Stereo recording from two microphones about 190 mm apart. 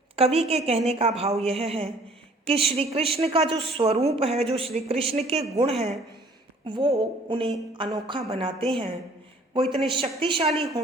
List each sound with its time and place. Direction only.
0.2 s a woman's voice: 30° right (ahead or behind)